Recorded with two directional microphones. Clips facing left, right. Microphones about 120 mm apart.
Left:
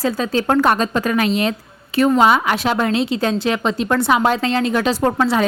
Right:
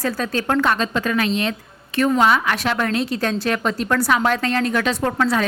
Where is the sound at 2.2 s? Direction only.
30° left (ahead or behind).